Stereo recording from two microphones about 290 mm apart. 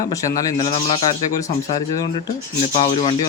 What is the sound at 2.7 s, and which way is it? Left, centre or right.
Speech, centre.